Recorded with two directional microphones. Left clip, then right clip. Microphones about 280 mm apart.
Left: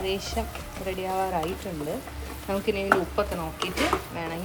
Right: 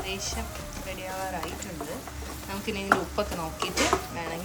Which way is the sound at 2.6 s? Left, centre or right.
Centre.